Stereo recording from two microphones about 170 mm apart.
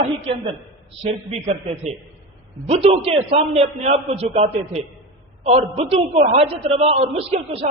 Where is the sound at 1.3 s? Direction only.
40° right (ahead or behind).